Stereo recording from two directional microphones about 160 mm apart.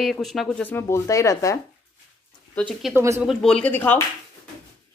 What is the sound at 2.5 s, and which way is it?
Speech, 5° left (ahead or behind).